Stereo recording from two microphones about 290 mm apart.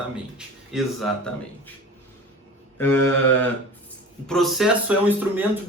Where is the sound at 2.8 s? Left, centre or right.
Centre.